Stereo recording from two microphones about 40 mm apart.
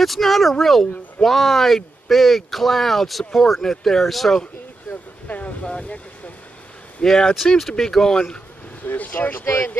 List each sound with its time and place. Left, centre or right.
0.0 s speech: centre
5.3 s speech: left
5.7 s speech: left
7.0 s speech: centre
8.8 s speech: left